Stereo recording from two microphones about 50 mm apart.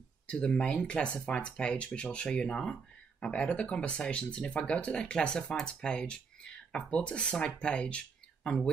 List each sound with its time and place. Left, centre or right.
0.3 s speech: left